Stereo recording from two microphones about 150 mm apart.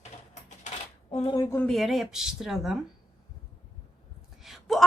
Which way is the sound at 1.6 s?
Centre (ahead or behind).